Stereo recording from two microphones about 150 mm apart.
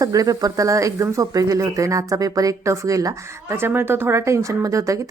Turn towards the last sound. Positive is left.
turn(degrees=-20)  # may be behind; listen again after turning